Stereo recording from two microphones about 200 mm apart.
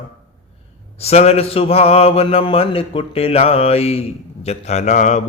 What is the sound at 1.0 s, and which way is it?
Mantra, 30° left (ahead or behind).